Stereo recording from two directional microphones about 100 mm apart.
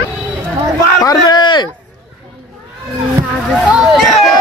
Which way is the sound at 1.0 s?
45° left (ahead or behind).